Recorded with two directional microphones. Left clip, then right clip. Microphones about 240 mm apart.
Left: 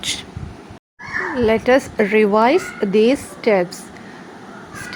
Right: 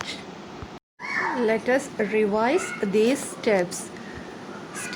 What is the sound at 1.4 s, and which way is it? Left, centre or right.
Speech, left.